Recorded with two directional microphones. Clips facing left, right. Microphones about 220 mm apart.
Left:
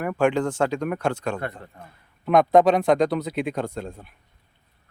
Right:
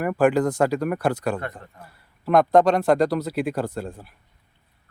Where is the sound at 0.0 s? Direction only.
5° right (ahead or behind).